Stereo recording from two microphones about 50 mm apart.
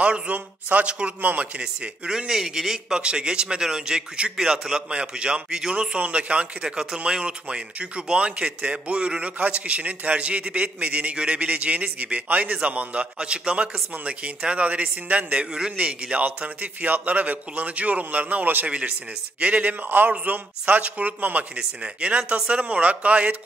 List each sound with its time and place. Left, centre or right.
0.0 s speech: right
1.6 s speech: centre
3.0 s a man's voice: centre
21.5 s speech: right